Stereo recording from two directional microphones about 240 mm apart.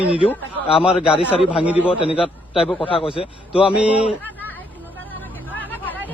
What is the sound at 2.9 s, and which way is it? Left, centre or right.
Speech, left.